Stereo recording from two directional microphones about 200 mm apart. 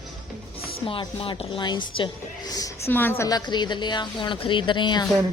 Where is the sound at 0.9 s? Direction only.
25° left (ahead or behind).